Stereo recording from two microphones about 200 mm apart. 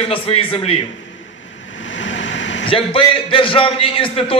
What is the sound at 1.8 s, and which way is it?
Vehicle, 65° left (ahead or behind).